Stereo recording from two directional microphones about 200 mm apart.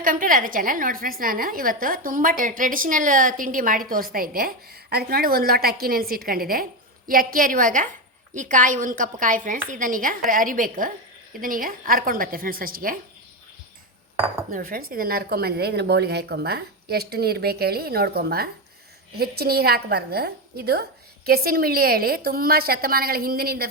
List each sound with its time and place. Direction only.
0.0 s a woman's voice: 45° right (ahead or behind)
14.5 s a woman's voice: 45° right (ahead or behind)